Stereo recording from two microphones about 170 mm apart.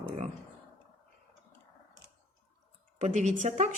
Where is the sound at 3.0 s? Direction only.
45° right (ahead or behind).